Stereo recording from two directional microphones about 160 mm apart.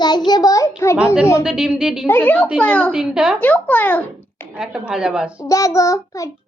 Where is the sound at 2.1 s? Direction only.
10° left (ahead or behind).